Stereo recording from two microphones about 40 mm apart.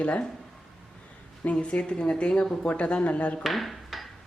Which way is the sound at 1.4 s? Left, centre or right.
Left.